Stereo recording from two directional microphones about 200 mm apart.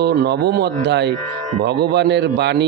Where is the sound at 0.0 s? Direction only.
55° right (ahead or behind).